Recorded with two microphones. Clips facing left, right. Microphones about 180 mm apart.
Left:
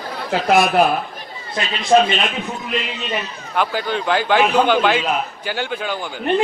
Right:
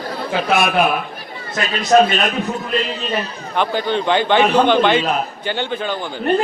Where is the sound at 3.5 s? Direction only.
5° left (ahead or behind).